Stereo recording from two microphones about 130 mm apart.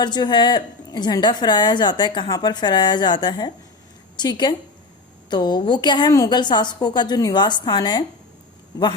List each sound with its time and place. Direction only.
0.0 s a woman's voice: 35° left (ahead or behind)